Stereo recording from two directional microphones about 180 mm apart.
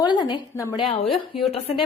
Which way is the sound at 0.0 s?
25° left (ahead or behind).